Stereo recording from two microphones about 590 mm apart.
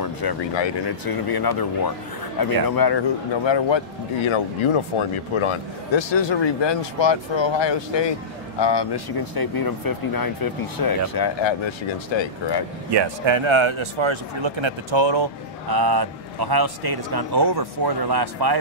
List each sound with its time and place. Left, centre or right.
0.0 s speech: left
12.9 s a man's voice: right